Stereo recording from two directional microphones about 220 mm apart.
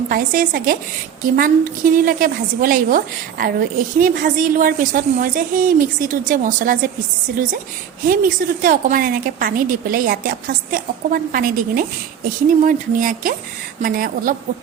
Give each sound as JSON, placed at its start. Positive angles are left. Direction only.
{"t": 0.1, "sound": "a woman's voice", "side_deg": -40}
{"t": 8.0, "sound": "a woman's voice", "side_deg": -40}